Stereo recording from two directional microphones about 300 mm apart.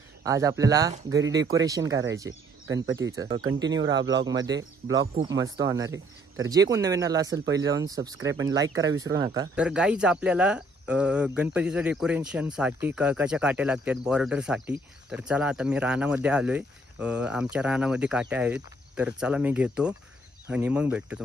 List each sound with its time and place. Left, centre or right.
0.2 s speech: centre
3.7 s speech: right
4.3 s speech: centre
5.0 s speech: right
5.3 s speech: centre